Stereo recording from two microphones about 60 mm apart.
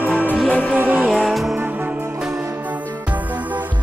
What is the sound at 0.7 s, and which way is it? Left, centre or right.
Music, right.